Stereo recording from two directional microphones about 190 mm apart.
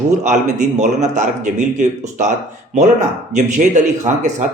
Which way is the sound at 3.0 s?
40° right (ahead or behind).